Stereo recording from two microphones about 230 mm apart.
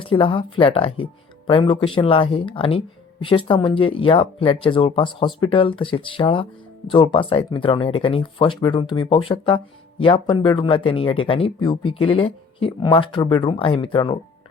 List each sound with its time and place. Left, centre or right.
0.0 s speech: left